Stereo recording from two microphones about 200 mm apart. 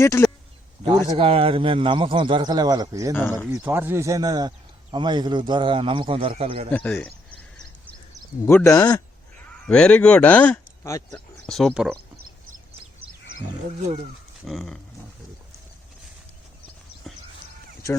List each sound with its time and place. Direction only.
0.0 s speech: 15° left (ahead or behind)
1.1 s speech: 30° right (ahead or behind)
3.1 s speech: 10° left (ahead or behind)
3.4 s speech: 5° right (ahead or behind); by 6.7 s 30° right (ahead or behind)
6.7 s a sound: 10° left (ahead or behind)
8.4 s speech: 15° left (ahead or behind)
9.6 s speech: 5° left (ahead or behind)
14.4 s speech: centre (ahead or behind)
17.1 s a sound: centre (ahead or behind)